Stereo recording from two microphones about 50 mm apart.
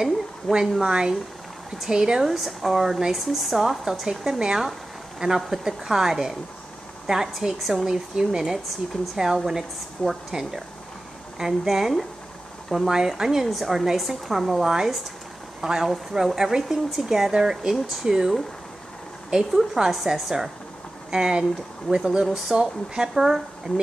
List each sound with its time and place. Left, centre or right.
0.0 s speech: centre
7.8 s speech: centre
19.5 s speech: centre